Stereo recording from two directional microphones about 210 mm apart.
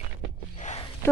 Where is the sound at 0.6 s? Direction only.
35° left (ahead or behind).